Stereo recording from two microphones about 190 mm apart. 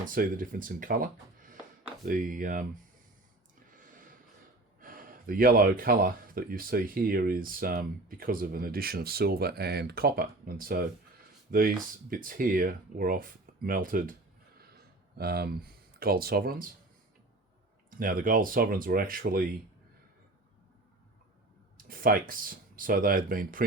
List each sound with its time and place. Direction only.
0.0 s speech: 45° right (ahead or behind)
4.8 s speech: 50° right (ahead or behind)
15.2 s speech: 55° right (ahead or behind)
17.9 s speech: 45° right (ahead or behind)
21.8 s speech: 50° right (ahead or behind)